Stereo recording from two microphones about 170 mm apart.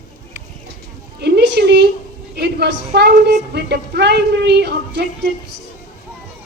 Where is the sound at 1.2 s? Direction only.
80° right.